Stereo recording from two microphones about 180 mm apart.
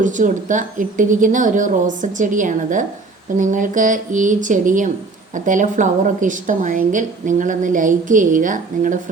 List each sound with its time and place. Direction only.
0.0 s a woman's voice: 45° right (ahead or behind)